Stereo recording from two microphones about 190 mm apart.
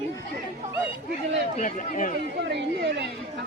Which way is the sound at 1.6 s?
40° left (ahead or behind).